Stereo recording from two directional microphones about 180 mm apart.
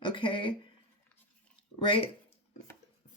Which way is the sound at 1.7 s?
30° left (ahead or behind).